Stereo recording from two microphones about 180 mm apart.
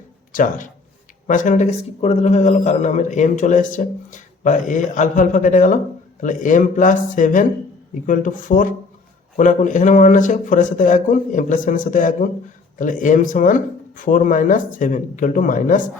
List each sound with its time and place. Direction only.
0.3 s a man's voice: 45° left (ahead or behind)